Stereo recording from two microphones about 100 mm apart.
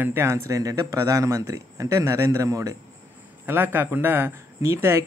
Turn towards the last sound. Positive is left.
turn(degrees=-30)  # may be behind; listen again after turning